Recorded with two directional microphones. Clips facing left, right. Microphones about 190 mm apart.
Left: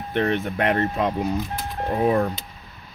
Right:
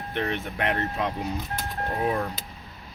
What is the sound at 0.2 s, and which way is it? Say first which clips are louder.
Speech: left 6 dB; 50° left (ahead or behind).